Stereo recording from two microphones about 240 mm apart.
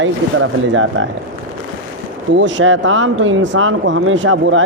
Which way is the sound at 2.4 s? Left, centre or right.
Right.